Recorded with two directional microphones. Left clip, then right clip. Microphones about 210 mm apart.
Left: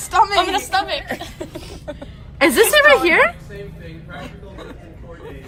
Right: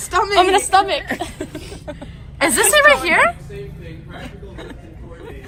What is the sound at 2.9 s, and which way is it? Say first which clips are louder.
Speech: even; 15° right (ahead or behind).